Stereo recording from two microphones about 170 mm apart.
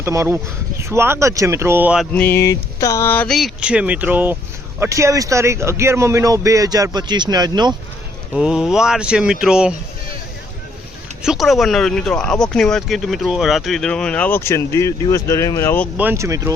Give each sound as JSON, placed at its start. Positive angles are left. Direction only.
{"t": 0.0, "sound": "speech", "side_deg": -15}
{"t": 2.1, "sound": "a man's voice", "side_deg": 10}
{"t": 8.3, "sound": "speech", "side_deg": -5}
{"t": 11.2, "sound": "speech", "side_deg": 0}
{"t": 16.0, "sound": "speech", "side_deg": -15}